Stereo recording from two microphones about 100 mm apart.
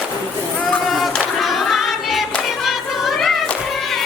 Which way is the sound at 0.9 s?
Centre (ahead or behind).